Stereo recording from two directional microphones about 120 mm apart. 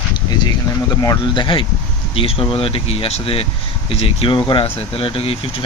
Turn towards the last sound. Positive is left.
turn(degrees=50)  # may be behind; listen again after turning